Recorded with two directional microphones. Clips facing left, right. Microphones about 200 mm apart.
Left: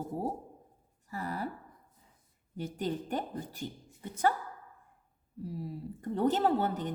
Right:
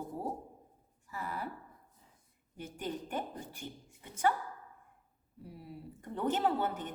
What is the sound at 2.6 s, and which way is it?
Speech, 40° left (ahead or behind).